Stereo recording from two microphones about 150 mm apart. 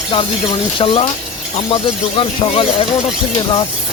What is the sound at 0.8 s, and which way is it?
Speech, 35° left (ahead or behind).